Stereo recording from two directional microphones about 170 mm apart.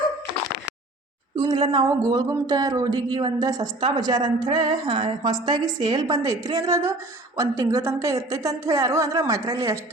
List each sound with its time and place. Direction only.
1.4 s speech: 25° right (ahead or behind)